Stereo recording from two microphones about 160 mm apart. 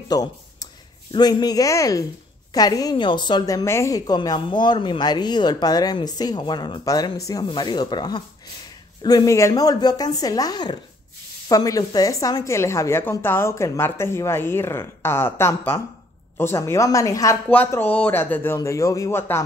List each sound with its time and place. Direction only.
0.1 s a woman's voice: 25° left (ahead or behind)